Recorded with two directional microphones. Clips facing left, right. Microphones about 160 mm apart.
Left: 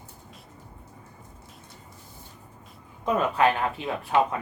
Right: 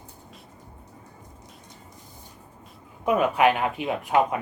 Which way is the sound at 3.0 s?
10° right (ahead or behind).